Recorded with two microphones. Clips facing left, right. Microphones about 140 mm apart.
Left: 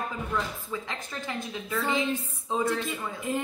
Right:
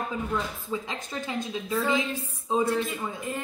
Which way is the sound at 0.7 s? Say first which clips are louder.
Right 3 dB; 15° right (ahead or behind).